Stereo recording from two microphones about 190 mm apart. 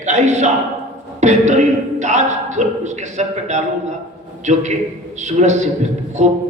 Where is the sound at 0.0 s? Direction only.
40° right (ahead or behind).